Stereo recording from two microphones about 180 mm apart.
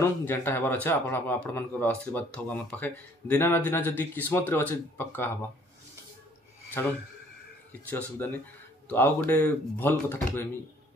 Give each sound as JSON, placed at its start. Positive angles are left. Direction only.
{"t": 0.0, "sound": "a man's voice", "side_deg": 10}
{"t": 7.9, "sound": "a man's voice", "side_deg": 10}